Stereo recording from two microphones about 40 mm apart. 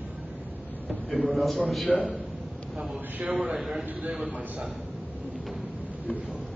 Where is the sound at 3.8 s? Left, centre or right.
Right.